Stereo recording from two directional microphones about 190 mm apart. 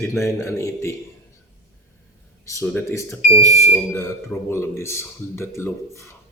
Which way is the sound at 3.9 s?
15° left (ahead or behind).